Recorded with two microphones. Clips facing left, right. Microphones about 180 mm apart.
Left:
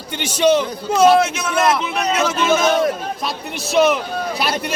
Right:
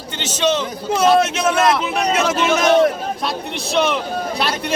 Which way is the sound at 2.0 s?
40° right (ahead or behind).